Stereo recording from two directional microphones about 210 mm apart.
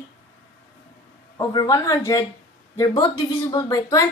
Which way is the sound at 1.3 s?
15° left (ahead or behind).